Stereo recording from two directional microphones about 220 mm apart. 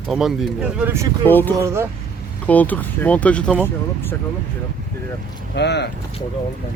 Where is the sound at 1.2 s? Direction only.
10° left (ahead or behind).